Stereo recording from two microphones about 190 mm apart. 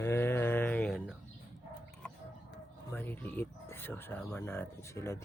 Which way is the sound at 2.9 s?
10° left (ahead or behind).